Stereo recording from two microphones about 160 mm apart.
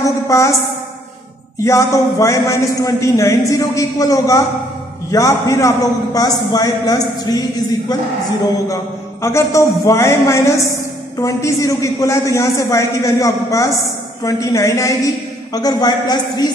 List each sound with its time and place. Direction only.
0.3 s a man's voice: 20° left (ahead or behind)
1.6 s a man's voice: 20° left (ahead or behind)
9.2 s a woman's voice: 20° left (ahead or behind)